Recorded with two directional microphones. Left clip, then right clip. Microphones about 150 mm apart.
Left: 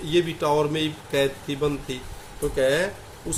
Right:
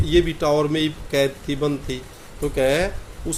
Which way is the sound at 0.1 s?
30° right (ahead or behind).